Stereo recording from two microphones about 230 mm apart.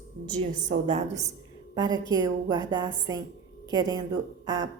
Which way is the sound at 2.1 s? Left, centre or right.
Centre.